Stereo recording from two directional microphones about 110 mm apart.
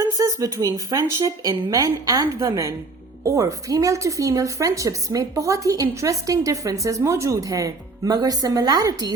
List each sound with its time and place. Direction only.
0.0 s speech: 30° right (ahead or behind)